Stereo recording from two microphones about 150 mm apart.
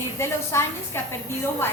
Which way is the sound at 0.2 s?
15° left (ahead or behind).